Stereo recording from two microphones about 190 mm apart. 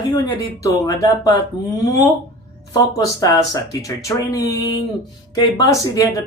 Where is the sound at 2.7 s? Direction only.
20° left (ahead or behind).